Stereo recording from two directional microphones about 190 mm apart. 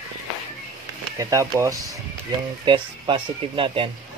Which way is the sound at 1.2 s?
15° right (ahead or behind).